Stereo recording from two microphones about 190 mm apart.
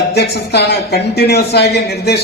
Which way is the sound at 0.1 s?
60° left (ahead or behind).